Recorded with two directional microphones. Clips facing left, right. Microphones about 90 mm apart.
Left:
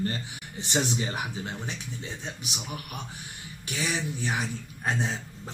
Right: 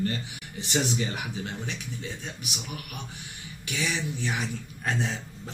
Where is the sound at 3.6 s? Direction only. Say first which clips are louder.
Even; 35° left (ahead or behind).